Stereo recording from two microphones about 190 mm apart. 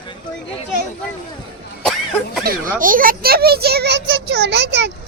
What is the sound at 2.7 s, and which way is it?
A child's voice, 45° right (ahead or behind).